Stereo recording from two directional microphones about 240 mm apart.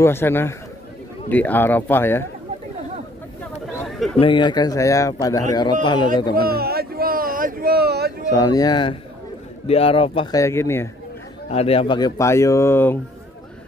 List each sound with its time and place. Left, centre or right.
0.0 s speech: centre
4.2 s a man's voice: centre
6.3 s a sound: right
8.3 s speech: centre
11.5 s speech: left